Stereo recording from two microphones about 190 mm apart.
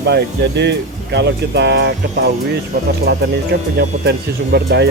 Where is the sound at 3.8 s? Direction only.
60° right (ahead or behind).